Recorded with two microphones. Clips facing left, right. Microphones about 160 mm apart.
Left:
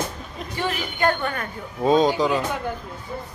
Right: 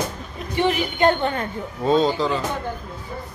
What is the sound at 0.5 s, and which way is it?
Speech, 20° right (ahead or behind).